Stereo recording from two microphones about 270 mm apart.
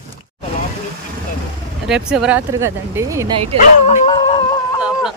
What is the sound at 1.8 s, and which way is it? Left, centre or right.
Speech, centre.